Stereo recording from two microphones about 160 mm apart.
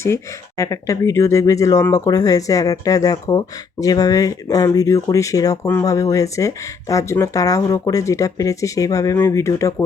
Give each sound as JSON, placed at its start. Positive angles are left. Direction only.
{"t": 0.0, "sound": "speech", "side_deg": 15}